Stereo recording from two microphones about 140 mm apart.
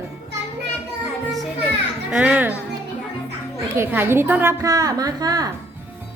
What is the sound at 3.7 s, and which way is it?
A woman's voice, 15° right (ahead or behind).